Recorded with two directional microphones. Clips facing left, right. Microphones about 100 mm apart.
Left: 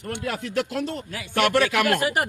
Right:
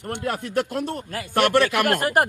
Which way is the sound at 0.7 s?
45° right (ahead or behind).